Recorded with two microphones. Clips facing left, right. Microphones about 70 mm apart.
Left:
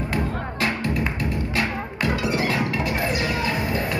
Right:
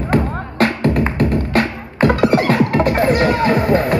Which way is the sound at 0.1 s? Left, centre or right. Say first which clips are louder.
Right 8 dB; right.